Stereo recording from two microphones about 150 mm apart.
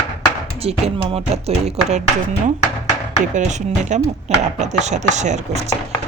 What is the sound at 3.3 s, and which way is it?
Speech, 50° right (ahead or behind).